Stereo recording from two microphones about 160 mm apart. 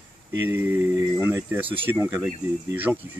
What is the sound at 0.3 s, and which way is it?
Speech, 15° right (ahead or behind).